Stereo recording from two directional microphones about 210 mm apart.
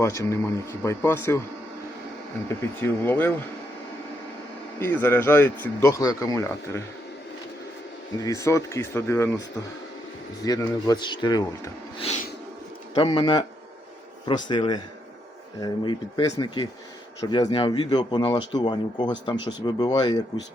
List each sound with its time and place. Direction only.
0.0 s speech: 15° left (ahead or behind)
2.8 s speech: 10° left (ahead or behind)
4.8 s speech: 10° left (ahead or behind)
8.2 s speech: 15° left (ahead or behind)
12.0 s a sound: 35° left (ahead or behind)
12.9 s speech: 25° left (ahead or behind)